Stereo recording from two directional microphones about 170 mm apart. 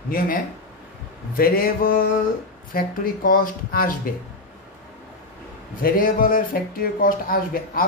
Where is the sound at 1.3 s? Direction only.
60° left (ahead or behind).